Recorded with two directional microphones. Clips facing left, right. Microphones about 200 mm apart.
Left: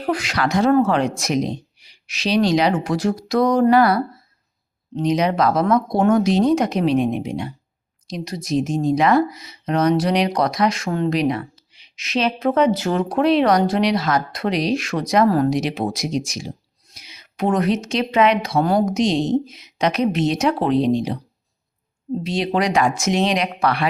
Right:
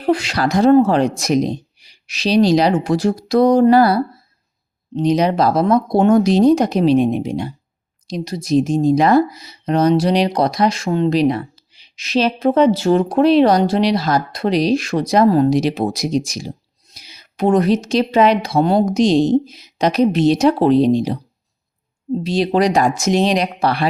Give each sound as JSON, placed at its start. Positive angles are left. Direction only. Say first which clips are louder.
{"t": 0.0, "sound": "speech", "louder": "right 4 dB", "side_deg": -30}
{"t": 22.2, "sound": "speech", "louder": "right 5 dB", "side_deg": -35}